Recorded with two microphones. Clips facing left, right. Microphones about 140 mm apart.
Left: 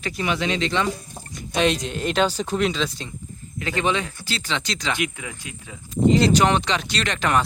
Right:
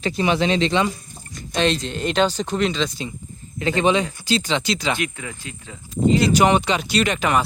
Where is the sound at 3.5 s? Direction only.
25° right (ahead or behind); by 5.0 s 10° right (ahead or behind).